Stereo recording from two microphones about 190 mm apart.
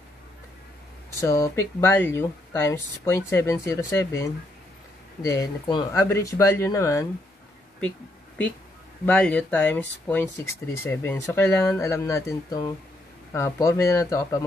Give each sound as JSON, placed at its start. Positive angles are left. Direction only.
{"t": 1.2, "sound": "speech", "side_deg": 15}
{"t": 9.0, "sound": "speech", "side_deg": 5}